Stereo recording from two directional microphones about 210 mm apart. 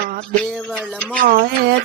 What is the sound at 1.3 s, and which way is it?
Music, 45° right (ahead or behind).